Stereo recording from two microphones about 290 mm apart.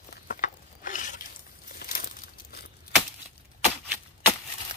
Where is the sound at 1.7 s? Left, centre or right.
Left.